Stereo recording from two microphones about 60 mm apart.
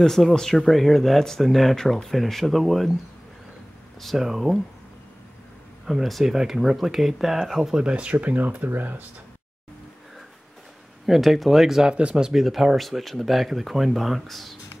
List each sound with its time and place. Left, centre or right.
0.0 s speech: centre
4.0 s speech: centre
5.9 s speech: centre
7.8 s speech: right
11.1 s speech: centre
12.3 s speech: centre